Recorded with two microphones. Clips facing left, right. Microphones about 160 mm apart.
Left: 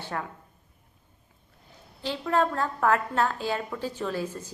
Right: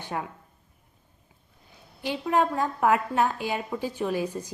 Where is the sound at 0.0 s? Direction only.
15° right (ahead or behind).